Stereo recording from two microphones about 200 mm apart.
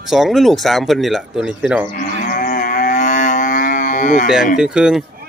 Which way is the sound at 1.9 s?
40° left (ahead or behind).